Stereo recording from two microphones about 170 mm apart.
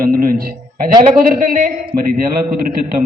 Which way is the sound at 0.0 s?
60° right (ahead or behind).